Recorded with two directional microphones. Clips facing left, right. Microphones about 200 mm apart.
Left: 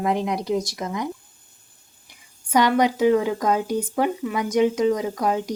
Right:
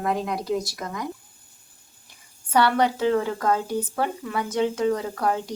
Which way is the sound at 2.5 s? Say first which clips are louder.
Left 2 dB; 15° left (ahead or behind).